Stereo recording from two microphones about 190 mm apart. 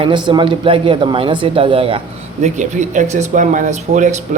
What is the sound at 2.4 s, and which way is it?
Speech, 40° right (ahead or behind).